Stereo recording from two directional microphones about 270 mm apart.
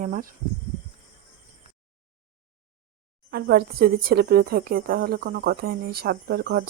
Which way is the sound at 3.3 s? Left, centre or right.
Right.